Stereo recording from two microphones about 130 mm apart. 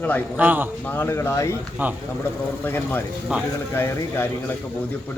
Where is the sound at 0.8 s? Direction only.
15° left (ahead or behind).